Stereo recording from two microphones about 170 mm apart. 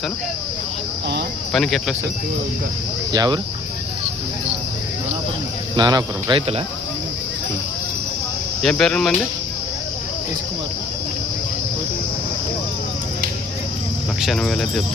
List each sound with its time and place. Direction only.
1.5 s speech: centre (ahead or behind)
3.1 s speech: 25° right (ahead or behind)
5.7 s speech: 25° right (ahead or behind)
8.6 s speech: 5° left (ahead or behind)
14.2 s speech: centre (ahead or behind)